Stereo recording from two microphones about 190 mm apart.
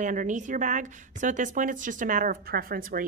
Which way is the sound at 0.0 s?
40° right (ahead or behind).